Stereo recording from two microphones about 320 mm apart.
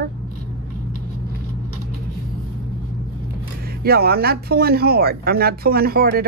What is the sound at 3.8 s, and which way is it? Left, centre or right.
Speech, right.